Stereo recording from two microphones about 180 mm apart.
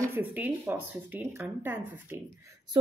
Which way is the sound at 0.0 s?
10° right (ahead or behind).